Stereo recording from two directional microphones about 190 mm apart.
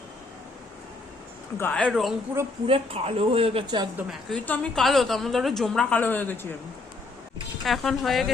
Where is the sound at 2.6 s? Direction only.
30° right (ahead or behind).